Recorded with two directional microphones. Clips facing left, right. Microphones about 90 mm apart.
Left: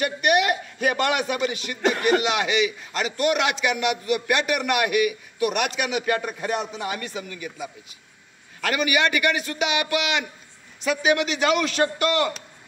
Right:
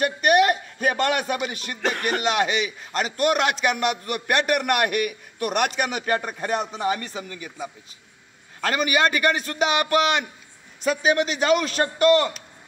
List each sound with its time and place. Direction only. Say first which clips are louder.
0.0 s a sound: right 3 dB; 40° right (ahead or behind)
1.5 s a man's voice: left 2 dB; 40° right (ahead or behind)
1.9 s speech: left 5 dB; 5° left (ahead or behind)
3.2 s a man's voice: right 1 dB; 45° right (ahead or behind)